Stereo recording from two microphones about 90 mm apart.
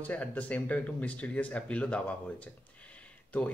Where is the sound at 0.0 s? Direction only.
15° left (ahead or behind).